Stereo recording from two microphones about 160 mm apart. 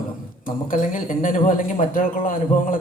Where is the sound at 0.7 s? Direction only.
55° left (ahead or behind).